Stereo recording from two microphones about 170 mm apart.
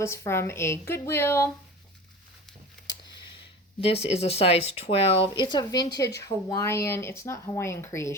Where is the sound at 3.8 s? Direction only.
35° left (ahead or behind); by 8.1 s 15° left (ahead or behind).